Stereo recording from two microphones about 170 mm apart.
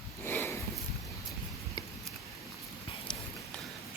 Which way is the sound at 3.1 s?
25° left (ahead or behind).